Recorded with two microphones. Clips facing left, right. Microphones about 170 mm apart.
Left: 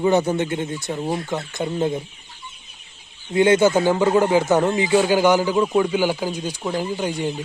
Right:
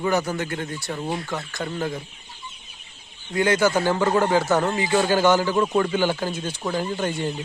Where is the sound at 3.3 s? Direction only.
20° left (ahead or behind).